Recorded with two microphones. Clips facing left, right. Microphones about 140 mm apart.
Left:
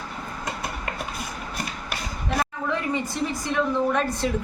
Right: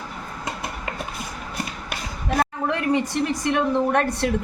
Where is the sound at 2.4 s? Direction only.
65° right (ahead or behind).